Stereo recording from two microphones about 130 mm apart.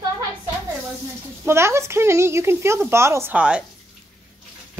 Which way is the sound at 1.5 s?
20° right (ahead or behind).